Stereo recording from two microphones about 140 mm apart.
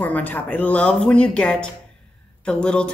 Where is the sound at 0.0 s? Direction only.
10° left (ahead or behind).